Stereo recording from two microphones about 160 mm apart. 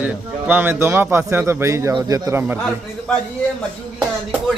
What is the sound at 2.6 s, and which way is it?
Speech, 5° left (ahead or behind).